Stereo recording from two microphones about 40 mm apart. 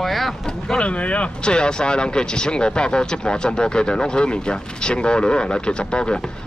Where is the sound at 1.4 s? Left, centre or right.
Left.